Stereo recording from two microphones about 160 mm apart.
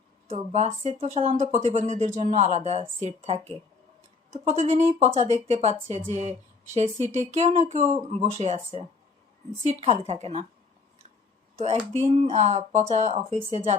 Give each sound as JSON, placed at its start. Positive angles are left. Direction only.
{"t": 0.3, "sound": "speech", "side_deg": -45}
{"t": 11.5, "sound": "speech", "side_deg": -45}